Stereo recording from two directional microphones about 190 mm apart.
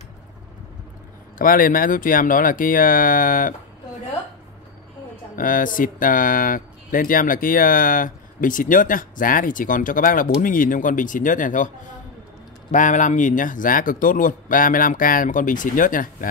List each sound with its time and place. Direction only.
1.4 s speech: 45° left (ahead or behind)
5.3 s speech: 45° left (ahead or behind)
12.7 s speech: 40° left (ahead or behind)